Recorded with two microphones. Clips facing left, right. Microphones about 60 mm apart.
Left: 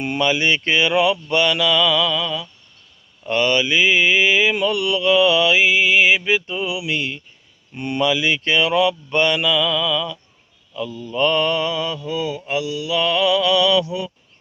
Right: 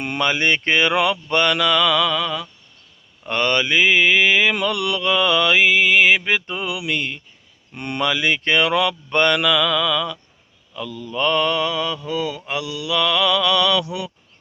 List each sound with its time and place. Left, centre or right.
0.0 s mantra: right
13.8 s speech: right